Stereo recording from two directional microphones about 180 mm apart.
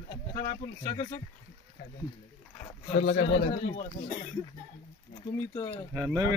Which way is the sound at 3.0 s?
80° left.